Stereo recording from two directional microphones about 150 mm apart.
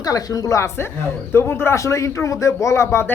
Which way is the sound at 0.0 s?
25° left (ahead or behind).